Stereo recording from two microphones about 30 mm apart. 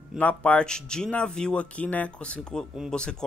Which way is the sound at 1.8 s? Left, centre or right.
Left.